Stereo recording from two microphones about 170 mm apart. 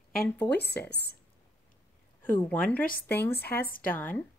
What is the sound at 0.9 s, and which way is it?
Speech, 70° left (ahead or behind).